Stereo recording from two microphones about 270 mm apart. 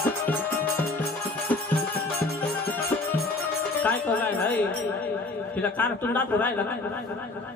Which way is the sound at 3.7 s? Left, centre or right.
Centre.